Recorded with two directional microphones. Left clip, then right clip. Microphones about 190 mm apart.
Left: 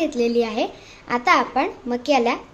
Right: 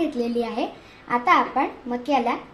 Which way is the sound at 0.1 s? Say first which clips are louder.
Left 5 dB; 20° left (ahead or behind).